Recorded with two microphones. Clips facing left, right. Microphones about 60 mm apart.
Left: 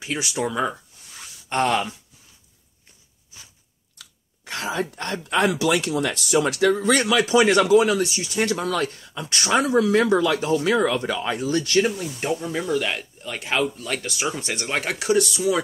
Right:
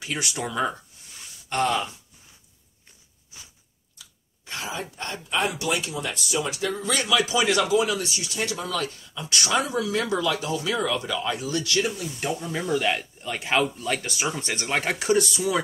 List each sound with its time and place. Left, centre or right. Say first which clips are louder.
0.0 s speech: left 4 dB; centre
1.5 s speech: left 3 dB; left
4.0 s speech: left 4 dB; left
6.7 s speech: left 5 dB; left
12.2 s speech: left 3 dB; left
12.4 s a man's voice: right 3 dB; centre